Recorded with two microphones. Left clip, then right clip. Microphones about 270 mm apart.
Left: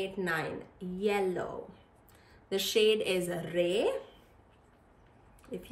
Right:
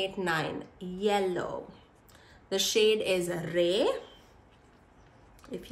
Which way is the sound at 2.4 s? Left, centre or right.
Centre.